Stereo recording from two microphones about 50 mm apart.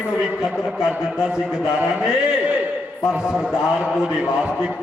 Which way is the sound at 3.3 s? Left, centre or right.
Centre.